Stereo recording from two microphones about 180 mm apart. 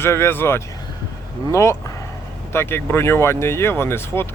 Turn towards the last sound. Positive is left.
turn(degrees=15)  # may be behind; listen again after turning